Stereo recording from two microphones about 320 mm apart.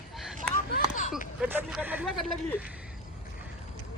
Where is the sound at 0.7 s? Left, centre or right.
Left.